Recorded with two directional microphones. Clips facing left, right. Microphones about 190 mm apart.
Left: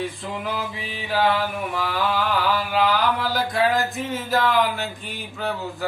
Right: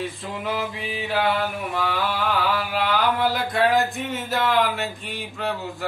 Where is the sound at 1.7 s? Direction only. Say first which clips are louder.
Left 2 dB; centre (ahead or behind).